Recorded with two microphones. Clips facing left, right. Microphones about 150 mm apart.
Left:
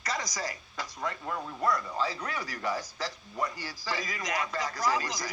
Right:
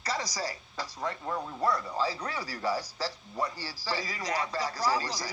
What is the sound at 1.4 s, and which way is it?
Speech, 15° right (ahead or behind).